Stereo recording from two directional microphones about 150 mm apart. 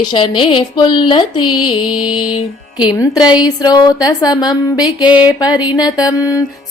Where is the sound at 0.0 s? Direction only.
30° left (ahead or behind).